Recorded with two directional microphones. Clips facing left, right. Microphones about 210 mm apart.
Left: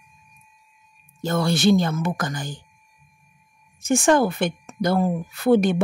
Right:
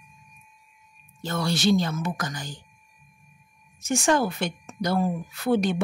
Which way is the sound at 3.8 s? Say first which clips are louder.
Left 5 dB; 55° left (ahead or behind).